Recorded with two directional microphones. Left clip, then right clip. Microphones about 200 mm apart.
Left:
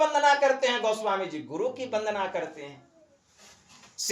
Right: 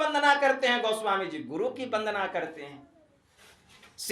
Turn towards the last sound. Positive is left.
turn(degrees=0)  # may be behind; listen again after turning